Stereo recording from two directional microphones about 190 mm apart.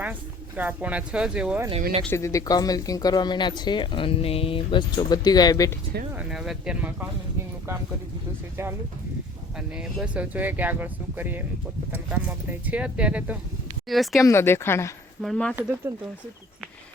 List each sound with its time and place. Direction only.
0.0 s speech: 10° right (ahead or behind)
2.0 s speech: 15° left (ahead or behind)
6.1 s speech: 5° right (ahead or behind)
9.6 s speech: 5° right (ahead or behind)
14.2 s speech: 15° left (ahead or behind)
15.2 s speech: 5° left (ahead or behind)
15.9 s speech: 15° right (ahead or behind)